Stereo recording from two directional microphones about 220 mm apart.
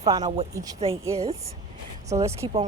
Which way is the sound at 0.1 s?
15° right (ahead or behind).